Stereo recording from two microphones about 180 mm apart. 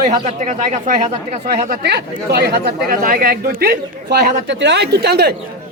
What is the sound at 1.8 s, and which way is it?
Speech, 65° right (ahead or behind).